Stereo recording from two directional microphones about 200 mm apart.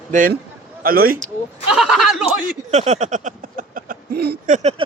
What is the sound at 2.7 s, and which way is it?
Speech, 35° right (ahead or behind).